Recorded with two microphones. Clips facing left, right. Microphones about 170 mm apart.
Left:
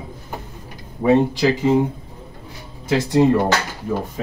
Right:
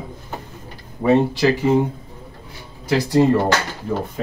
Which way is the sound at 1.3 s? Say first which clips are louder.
Even; 15° left (ahead or behind).